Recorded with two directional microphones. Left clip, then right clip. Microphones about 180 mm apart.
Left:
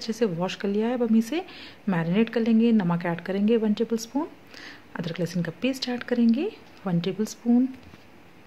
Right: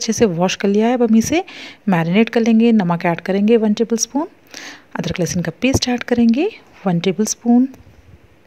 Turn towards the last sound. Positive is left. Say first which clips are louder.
# right 9 dB
turn(degrees=-40)  # may be behind; listen again after turning